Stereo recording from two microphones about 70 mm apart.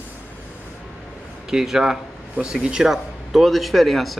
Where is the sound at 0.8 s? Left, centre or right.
Centre.